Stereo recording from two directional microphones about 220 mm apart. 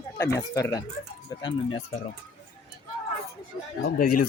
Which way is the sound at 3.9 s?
90° left.